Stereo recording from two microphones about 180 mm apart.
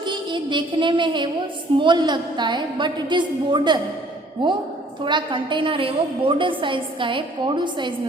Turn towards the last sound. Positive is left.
turn(degrees=-25)  # may be behind; listen again after turning